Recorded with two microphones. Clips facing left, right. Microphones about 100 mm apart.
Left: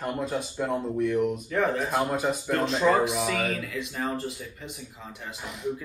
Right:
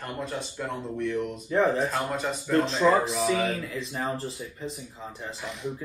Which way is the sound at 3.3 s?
30° right (ahead or behind).